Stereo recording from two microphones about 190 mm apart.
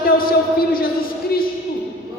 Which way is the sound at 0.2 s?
50° left (ahead or behind).